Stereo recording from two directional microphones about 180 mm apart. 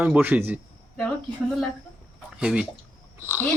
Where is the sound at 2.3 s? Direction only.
5° right (ahead or behind).